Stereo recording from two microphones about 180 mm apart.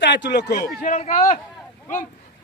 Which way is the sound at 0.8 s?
45° left (ahead or behind).